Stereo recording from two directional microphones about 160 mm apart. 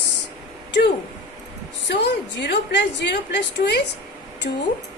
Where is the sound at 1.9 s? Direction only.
90° left.